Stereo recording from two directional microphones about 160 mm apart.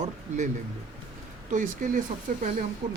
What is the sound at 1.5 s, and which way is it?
Speech, 55° right (ahead or behind).